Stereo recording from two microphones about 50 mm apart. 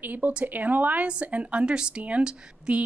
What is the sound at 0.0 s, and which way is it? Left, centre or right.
A woman's voice, right.